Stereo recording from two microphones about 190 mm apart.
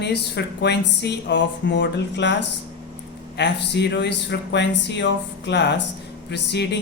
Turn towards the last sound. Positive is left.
turn(degrees=60)  # may be behind; listen again after turning